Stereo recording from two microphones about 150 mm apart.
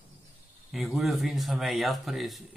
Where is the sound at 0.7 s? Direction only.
Centre (ahead or behind).